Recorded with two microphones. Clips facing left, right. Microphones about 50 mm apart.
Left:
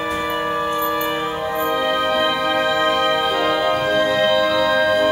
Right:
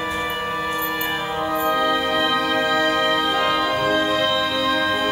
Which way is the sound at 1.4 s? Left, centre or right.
Centre.